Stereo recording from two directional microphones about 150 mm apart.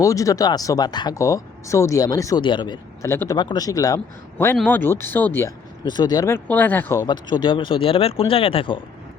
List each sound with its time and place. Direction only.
0.0 s speech: 20° left (ahead or behind)
3.0 s speech: 20° left (ahead or behind)
3.3 s speech: 30° left (ahead or behind)
5.8 s speech: 30° left (ahead or behind)
6.3 s speech: 10° left (ahead or behind)
7.1 s speech: 30° left (ahead or behind)